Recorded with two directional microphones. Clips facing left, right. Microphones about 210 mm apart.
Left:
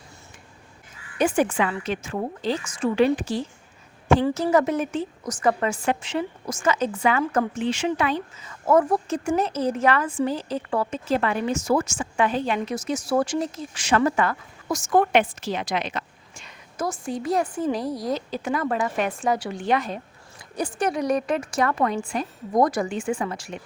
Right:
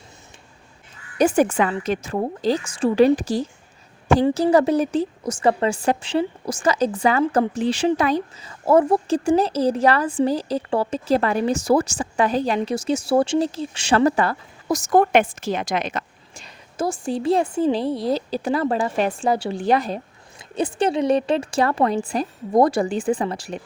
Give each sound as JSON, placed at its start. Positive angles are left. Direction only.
{"t": 1.2, "sound": "speech", "side_deg": -40}